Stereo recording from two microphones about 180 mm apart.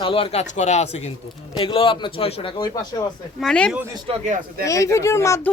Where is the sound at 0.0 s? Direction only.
30° left (ahead or behind).